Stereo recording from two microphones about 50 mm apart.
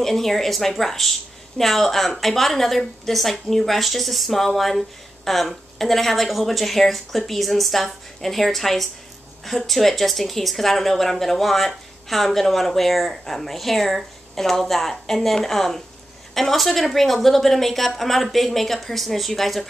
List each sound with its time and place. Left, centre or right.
0.0 s speech: centre